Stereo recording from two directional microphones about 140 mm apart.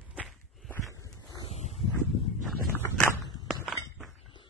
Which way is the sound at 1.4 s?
50° left (ahead or behind).